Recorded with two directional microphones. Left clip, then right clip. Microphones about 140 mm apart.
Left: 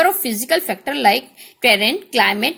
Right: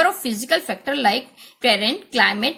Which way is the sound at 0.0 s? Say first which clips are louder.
Left 2 dB; 35° left (ahead or behind).